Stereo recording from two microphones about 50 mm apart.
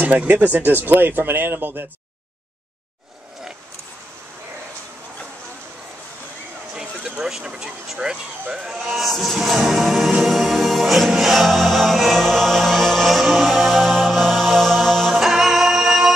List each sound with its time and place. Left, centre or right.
0.1 s speech: right
6.7 s a sound: centre
7.2 s speech: centre
8.7 s music: centre
15.1 s music: centre